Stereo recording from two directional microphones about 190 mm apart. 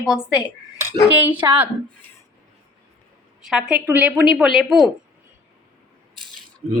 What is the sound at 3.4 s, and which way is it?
Speech, 5° right (ahead or behind).